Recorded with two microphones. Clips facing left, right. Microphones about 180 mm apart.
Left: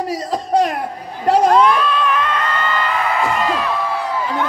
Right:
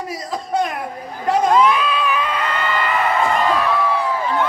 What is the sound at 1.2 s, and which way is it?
Crowd, 35° left (ahead or behind).